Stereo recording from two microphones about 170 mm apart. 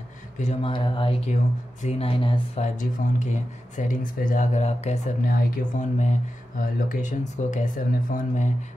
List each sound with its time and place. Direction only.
0.4 s speech: 35° left (ahead or behind)
1.3 s speech: 40° left (ahead or behind)
2.6 s speech: 45° left (ahead or behind)